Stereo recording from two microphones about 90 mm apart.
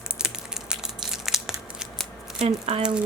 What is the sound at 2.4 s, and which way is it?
Speech, 90° right.